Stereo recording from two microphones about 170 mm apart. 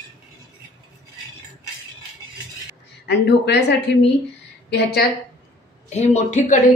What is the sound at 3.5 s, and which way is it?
Speech, 80° left.